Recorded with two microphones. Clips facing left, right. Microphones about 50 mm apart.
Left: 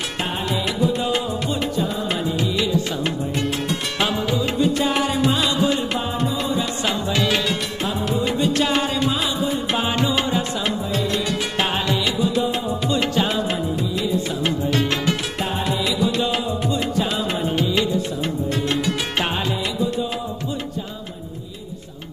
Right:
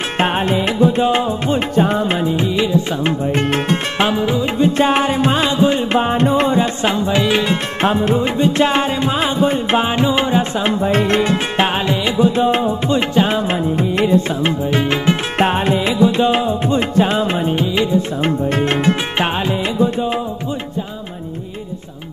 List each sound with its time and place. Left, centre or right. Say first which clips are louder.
0.2 s music: right 8 dB; right
1.8 s music: right 9 dB; right
2.0 s music: right 5 dB; right
4.1 s music: right 5 dB; right
7.8 s music: right 8 dB; right
10.8 s music: right 8 dB; right
14.4 s music: right 4 dB; right
15.3 s music: right 8 dB; right
17.6 s music: right 2 dB; right
18.2 s music: right 6 dB; right
19.1 s music: right 5 dB; right